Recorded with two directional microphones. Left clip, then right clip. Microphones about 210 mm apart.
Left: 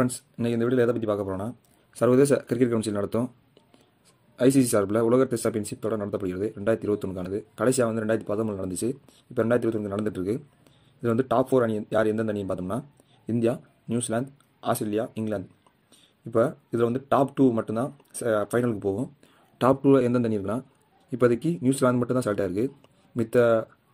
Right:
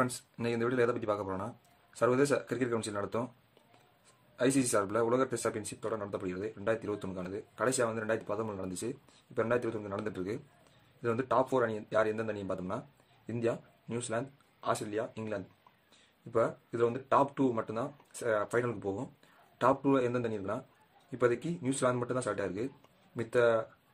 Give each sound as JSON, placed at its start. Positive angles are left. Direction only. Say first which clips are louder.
{"t": 0.0, "sound": "speech", "louder": "left 6 dB", "side_deg": 15}
{"t": 4.4, "sound": "speech", "louder": "left 8 dB", "side_deg": 25}